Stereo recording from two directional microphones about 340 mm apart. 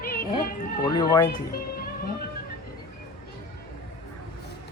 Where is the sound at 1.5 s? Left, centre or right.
Left.